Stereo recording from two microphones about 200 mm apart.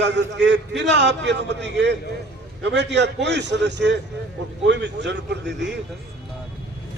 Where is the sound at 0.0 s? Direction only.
60° right (ahead or behind).